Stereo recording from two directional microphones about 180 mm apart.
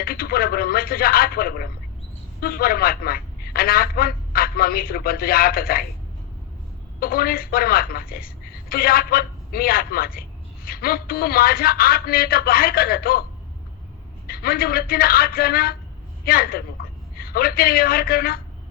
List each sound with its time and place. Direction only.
0.0 s a woman's voice: 55° left (ahead or behind)
7.0 s a woman's voice: 55° left (ahead or behind)
14.3 s a woman's voice: 55° left (ahead or behind)